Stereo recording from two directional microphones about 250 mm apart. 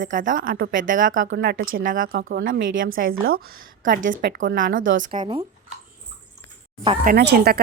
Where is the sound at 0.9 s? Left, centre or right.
Right.